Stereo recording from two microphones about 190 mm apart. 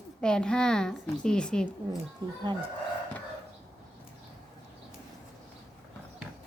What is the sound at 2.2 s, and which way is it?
Speech, 25° right (ahead or behind).